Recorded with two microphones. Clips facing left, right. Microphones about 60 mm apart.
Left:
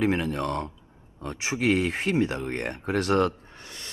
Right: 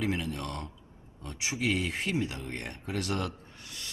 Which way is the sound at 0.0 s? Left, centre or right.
Left.